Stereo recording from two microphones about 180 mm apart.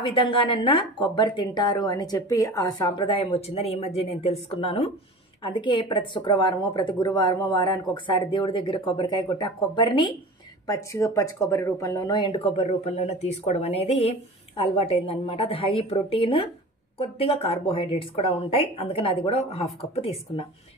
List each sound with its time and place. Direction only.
0.0 s speech: 30° left (ahead or behind)
12.6 s a woman's voice: 40° left (ahead or behind)